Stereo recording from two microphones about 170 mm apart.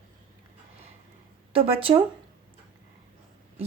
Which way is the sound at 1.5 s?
35° right (ahead or behind).